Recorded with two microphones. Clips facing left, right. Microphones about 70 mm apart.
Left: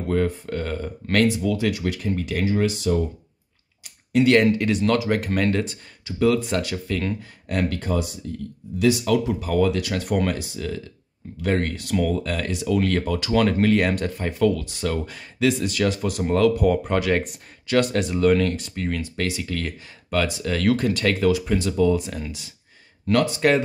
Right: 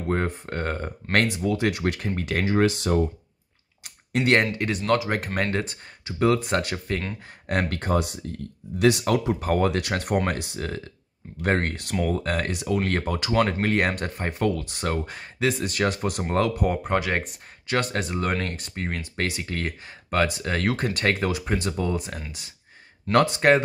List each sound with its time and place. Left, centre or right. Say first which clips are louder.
0.1 s speech: left 4 dB; right
1.4 s speech: left 1 dB; right
1.7 s speech: left 1 dB; right
3.8 s a sound: left 6 dB; right
4.3 s speech: left 3 dB; right
7.2 s speech: left 1 dB; right
12.6 s speech: left 5 dB; right
17.2 s speech: left 5 dB; right
18.9 s speech: left 2 dB; right
23.4 s speech: even; right